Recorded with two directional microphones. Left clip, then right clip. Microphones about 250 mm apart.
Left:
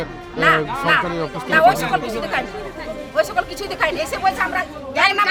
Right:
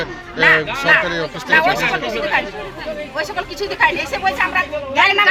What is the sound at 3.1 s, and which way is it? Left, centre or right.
Speech, left.